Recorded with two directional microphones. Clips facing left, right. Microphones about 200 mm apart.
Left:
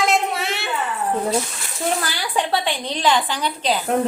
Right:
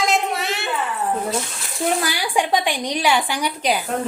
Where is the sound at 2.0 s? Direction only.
15° right (ahead or behind).